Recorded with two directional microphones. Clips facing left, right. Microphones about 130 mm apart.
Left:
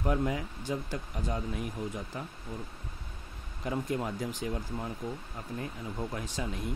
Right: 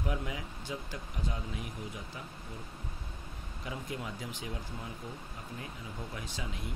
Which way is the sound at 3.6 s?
45° left (ahead or behind).